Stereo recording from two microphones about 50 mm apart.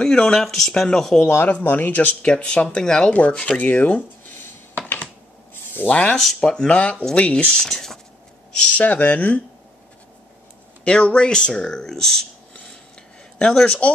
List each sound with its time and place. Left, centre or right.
0.0 s speech: centre
1.2 s speech: left
2.2 s speech: left
5.9 s speech: left
6.4 s speech: centre
6.7 s speech: left
7.4 s speech: centre
8.7 s speech: left
10.8 s speech: left
13.4 s speech: centre